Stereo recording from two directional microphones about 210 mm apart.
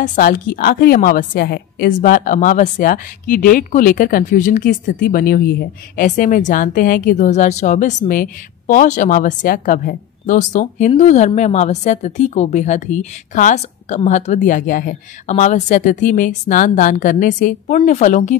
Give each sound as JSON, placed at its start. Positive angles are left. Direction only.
{"t": 0.0, "sound": "a woman's voice", "side_deg": 40}